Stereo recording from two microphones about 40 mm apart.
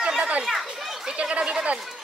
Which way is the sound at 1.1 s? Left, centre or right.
Right.